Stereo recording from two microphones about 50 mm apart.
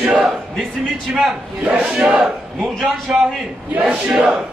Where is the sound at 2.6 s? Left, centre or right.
Centre.